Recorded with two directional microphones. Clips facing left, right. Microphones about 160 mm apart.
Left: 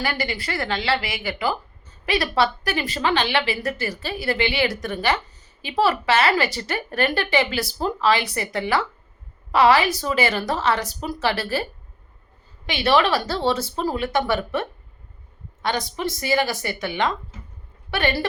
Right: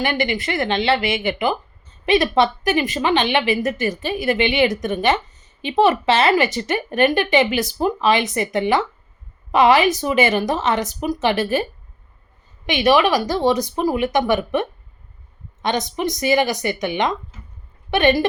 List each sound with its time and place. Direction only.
0.0 s speech: 20° right (ahead or behind)
12.6 s speech: 15° right (ahead or behind)